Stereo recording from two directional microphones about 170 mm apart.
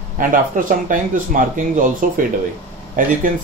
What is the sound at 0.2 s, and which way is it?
Speech, 50° right (ahead or behind).